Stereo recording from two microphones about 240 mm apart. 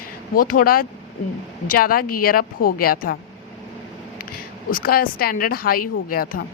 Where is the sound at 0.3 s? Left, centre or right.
Left.